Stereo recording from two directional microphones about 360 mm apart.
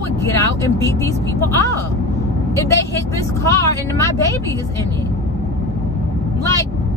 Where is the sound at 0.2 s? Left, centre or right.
Centre.